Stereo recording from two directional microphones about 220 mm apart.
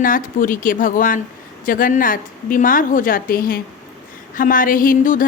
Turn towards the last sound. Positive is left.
turn(degrees=40)  # may be behind; listen again after turning